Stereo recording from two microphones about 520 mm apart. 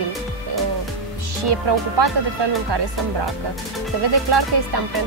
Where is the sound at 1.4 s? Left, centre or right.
Right.